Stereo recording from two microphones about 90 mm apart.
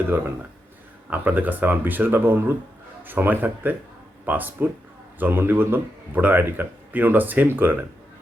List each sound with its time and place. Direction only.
1.1 s speech: 20° right (ahead or behind)